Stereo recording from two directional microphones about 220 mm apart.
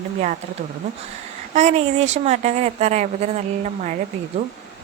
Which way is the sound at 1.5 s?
30° right (ahead or behind).